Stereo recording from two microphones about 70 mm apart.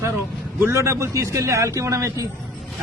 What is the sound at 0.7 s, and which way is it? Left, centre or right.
A man's voice, right.